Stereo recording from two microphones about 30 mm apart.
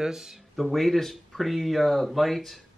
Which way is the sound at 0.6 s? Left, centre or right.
Centre.